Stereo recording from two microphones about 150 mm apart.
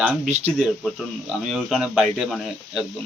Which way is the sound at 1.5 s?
5° right (ahead or behind).